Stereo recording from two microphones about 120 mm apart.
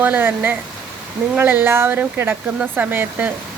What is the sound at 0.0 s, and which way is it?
Speech, 15° right (ahead or behind).